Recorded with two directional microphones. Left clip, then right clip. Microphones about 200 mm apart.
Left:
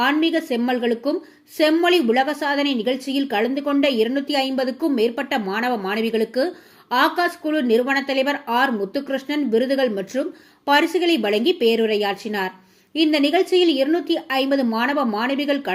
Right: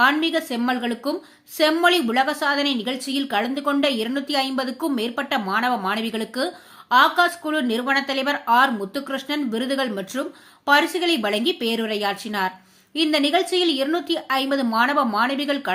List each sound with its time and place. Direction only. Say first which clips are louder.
0.0 s a woman's voice: right 1 dB; 5° right (ahead or behind)